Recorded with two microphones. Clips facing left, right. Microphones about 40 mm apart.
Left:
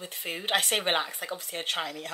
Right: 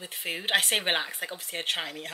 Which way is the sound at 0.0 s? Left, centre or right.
Centre.